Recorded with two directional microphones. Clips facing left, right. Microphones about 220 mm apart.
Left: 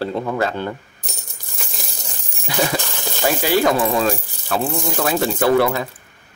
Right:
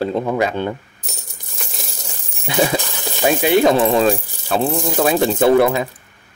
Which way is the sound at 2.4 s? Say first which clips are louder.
Right 3 dB; 20° right (ahead or behind).